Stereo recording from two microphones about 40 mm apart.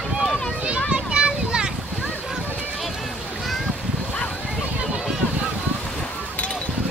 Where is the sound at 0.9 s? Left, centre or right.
Right.